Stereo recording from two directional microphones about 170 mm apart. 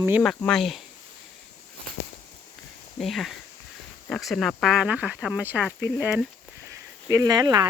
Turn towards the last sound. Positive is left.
turn(degrees=-25)  # may be behind; listen again after turning